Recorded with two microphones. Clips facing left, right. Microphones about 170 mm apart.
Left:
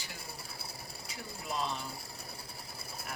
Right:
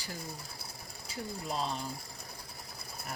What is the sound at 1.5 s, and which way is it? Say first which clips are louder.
Speech: even; 35° right (ahead or behind).